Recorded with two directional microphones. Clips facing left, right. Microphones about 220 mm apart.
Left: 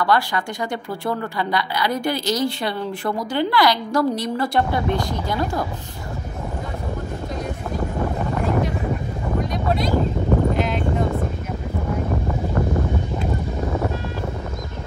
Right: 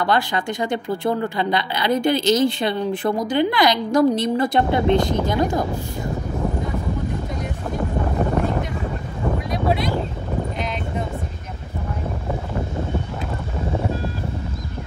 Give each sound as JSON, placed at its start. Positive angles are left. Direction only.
{"t": 0.0, "sound": "speech", "side_deg": -20}